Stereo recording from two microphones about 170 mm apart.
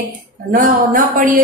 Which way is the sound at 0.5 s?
55° right (ahead or behind).